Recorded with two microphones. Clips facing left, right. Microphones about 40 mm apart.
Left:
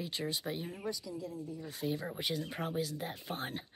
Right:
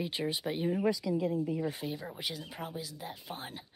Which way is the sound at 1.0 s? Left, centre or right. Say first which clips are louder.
Right 11 dB; right.